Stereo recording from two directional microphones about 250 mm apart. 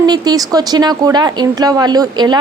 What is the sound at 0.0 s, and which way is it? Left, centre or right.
A woman's voice, centre.